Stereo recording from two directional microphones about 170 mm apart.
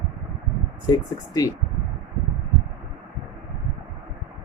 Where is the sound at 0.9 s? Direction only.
20° left (ahead or behind).